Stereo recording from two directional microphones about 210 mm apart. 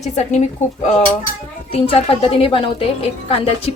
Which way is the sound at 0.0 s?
35° left (ahead or behind).